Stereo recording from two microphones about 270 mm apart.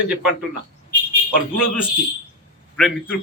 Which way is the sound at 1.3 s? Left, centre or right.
Left.